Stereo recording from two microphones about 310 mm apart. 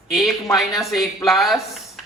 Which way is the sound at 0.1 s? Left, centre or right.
Centre.